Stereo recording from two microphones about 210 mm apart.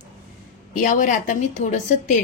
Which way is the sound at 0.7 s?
35° left (ahead or behind).